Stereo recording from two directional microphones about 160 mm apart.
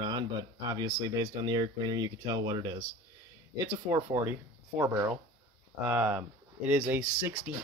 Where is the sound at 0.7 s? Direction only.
25° right (ahead or behind).